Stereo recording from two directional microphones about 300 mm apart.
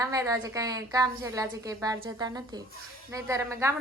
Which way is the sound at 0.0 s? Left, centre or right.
Centre.